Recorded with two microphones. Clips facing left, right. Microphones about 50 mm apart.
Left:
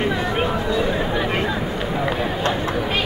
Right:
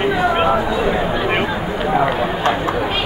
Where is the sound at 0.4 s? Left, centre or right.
Right.